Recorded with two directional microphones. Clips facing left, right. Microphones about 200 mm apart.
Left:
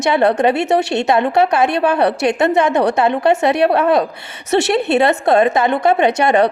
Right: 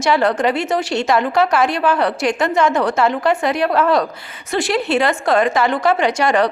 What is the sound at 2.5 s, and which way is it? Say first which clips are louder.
Speech: left 2 dB; 65° left (ahead or behind).